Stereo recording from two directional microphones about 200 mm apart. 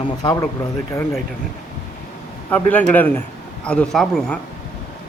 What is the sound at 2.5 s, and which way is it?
A man's voice, 10° left (ahead or behind).